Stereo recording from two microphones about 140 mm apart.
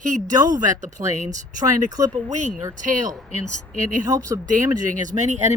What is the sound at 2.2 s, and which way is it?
Speech, 60° right (ahead or behind).